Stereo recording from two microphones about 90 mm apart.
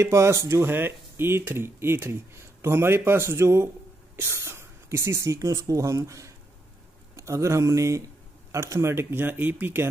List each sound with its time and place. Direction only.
0.0 s speech: 35° right (ahead or behind)